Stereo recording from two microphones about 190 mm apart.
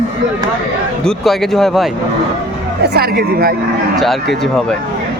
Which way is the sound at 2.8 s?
55° right (ahead or behind).